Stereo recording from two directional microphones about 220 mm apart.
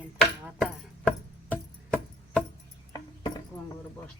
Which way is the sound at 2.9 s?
20° left (ahead or behind).